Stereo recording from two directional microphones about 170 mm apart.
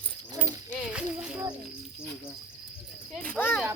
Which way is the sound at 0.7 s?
5° right (ahead or behind).